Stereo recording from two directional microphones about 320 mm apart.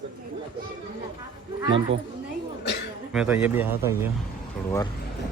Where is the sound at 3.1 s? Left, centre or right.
Centre.